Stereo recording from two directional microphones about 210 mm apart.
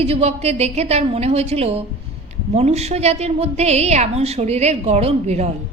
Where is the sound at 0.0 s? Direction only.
30° right (ahead or behind).